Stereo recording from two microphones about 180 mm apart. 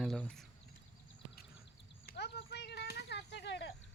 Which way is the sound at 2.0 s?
65° left (ahead or behind).